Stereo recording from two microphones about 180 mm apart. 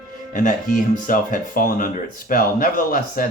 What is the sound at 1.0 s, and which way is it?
Speech, 50° left (ahead or behind).